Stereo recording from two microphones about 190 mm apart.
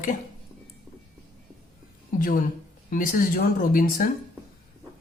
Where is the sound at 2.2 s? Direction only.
45° left (ahead or behind).